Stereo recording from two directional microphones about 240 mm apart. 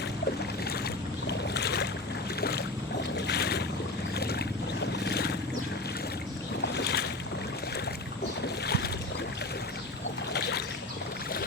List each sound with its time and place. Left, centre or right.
1.3 s boat: left
6.7 s boat: left
8.6 s boat: left
10.3 s boat: left